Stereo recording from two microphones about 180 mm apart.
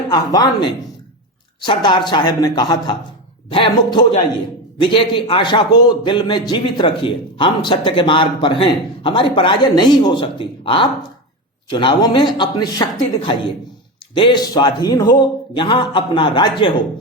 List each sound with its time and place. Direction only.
0.1 s a man's voice: 20° left (ahead or behind)
14.1 s a man's voice: 25° left (ahead or behind)